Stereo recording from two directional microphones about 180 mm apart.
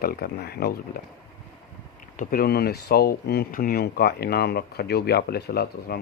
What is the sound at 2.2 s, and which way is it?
Speech, 55° left (ahead or behind).